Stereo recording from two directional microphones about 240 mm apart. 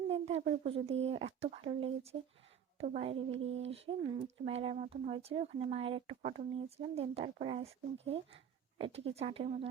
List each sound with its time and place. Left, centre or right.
0.1 s speech: right